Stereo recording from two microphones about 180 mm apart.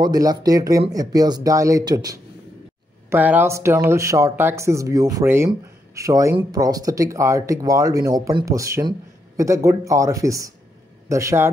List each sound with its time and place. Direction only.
0.0 s speech: 20° right (ahead or behind)
3.1 s speech: 10° right (ahead or behind)